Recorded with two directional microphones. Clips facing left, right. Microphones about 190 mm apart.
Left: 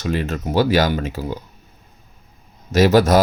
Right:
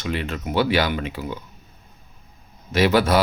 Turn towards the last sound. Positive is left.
turn(degrees=45)  # may be behind; listen again after turning